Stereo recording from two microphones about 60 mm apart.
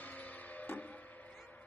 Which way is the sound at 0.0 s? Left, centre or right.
Left.